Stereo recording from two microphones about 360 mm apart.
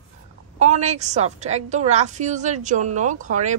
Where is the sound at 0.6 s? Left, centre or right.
Centre.